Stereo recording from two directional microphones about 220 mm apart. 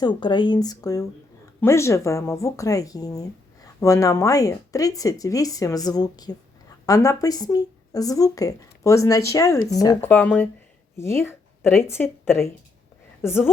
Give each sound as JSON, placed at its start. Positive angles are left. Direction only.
{"t": 0.0, "sound": "speech", "side_deg": 20}